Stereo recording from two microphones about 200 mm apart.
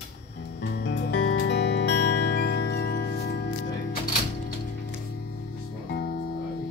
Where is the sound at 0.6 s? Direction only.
60° left (ahead or behind).